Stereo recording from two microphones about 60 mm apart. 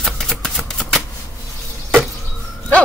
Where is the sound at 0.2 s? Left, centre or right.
Centre.